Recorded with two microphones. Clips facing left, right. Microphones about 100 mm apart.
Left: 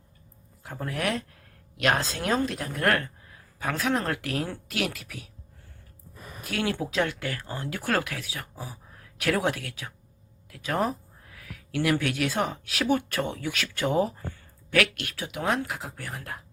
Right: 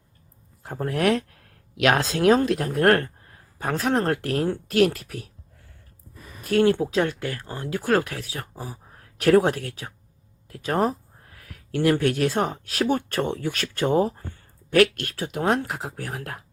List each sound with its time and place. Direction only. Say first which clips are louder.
0.6 s speech: right 7 dB; 45° right (ahead or behind)
3.6 s speech: right 4 dB; 40° right (ahead or behind)
6.5 s speech: right 10 dB; 40° right (ahead or behind)
16.0 s speech: right 4 dB; 55° right (ahead or behind)